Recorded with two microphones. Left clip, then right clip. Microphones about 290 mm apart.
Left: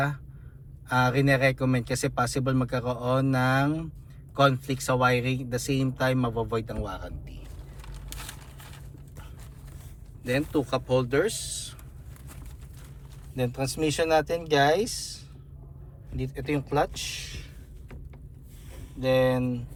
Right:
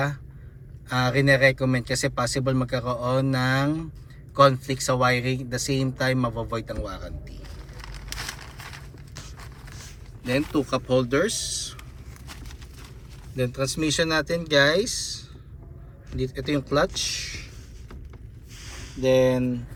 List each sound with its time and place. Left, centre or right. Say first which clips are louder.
0.9 s speech: right 2 dB; centre
7.8 s a sound: right 8 dB; right
10.2 s speech: right 2 dB; centre
13.3 s speech: right 3 dB; centre
16.4 s speech: right 3 dB; centre
18.6 s speech: right 5 dB; centre